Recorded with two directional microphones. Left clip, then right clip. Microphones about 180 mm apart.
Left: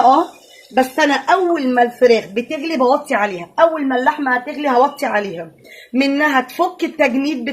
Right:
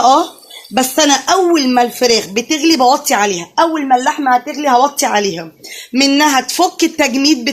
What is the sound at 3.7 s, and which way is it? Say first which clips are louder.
Speech: right 4 dB; 40° right (ahead or behind).